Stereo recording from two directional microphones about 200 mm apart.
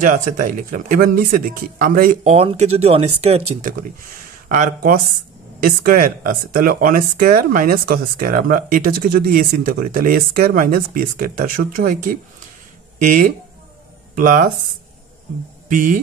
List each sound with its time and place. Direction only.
0.0 s speech: 40° right (ahead or behind)
2.3 s speech: 30° right (ahead or behind)
15.7 s speech: 40° right (ahead or behind)